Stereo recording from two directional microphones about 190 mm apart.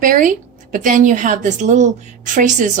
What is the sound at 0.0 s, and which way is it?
A woman's voice, 45° right (ahead or behind).